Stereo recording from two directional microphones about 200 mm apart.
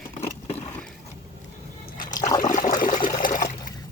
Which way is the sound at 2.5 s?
40° left (ahead or behind).